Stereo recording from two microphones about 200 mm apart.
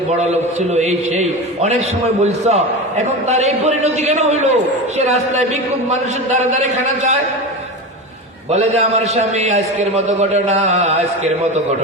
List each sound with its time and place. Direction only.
0.2 s a man's voice: 35° right (ahead or behind)
8.4 s a man's voice: 35° right (ahead or behind)